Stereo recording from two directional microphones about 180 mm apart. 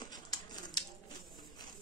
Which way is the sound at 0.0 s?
20° left (ahead or behind).